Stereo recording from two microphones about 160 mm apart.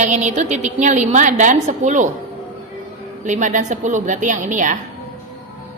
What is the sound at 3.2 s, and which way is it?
A woman's voice, 50° right (ahead or behind).